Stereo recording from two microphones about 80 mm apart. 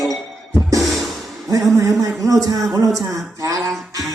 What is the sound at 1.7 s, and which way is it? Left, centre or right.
Speech, right.